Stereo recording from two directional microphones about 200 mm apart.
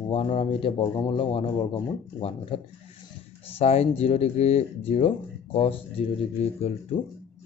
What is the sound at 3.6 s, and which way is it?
Speech, 30° left (ahead or behind).